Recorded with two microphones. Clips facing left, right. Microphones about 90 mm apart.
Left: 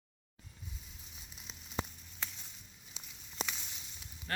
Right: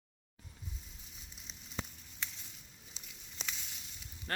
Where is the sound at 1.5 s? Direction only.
60° left (ahead or behind).